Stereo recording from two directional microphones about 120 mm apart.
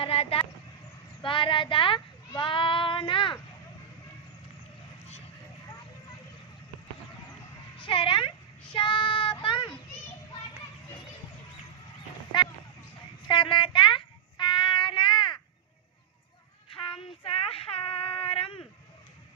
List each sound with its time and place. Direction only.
0.0 s vehicle: 50° left (ahead or behind)
1.2 s speech: 45° left (ahead or behind)
7.8 s speech: 45° left (ahead or behind)
8.7 s child singing: 45° left (ahead or behind)
13.2 s child singing: 45° left (ahead or behind)
16.6 s child singing: 50° left (ahead or behind)